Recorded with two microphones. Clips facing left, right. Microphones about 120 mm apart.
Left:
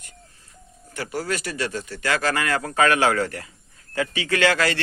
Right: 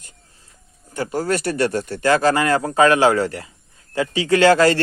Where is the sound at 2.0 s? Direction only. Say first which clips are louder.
Right 7 dB; 30° right (ahead or behind).